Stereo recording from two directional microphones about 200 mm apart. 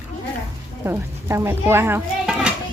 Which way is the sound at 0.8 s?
10° right (ahead or behind).